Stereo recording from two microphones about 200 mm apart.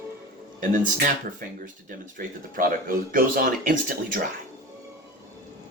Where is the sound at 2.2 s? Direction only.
45° right (ahead or behind).